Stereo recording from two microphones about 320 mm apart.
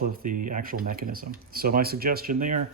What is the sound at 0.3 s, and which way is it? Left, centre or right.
Speech, right.